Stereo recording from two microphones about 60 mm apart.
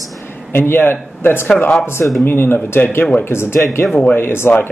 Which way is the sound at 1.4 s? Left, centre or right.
Left.